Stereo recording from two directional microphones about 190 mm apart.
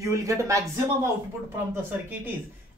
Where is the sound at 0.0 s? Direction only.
15° right (ahead or behind).